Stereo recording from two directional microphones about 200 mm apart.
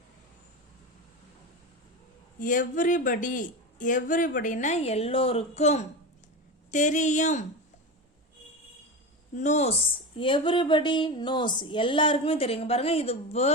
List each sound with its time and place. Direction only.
2.4 s speech: 40° left (ahead or behind)
9.3 s speech: 35° left (ahead or behind)